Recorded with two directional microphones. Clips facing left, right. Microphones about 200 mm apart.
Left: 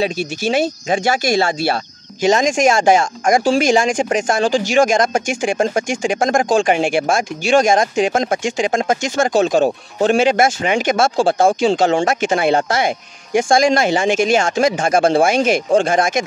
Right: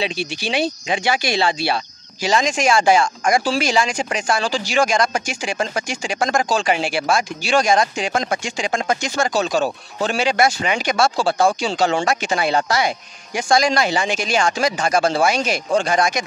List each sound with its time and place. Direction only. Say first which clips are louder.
0.0 s speech: left 5 dB; 45° left (ahead or behind)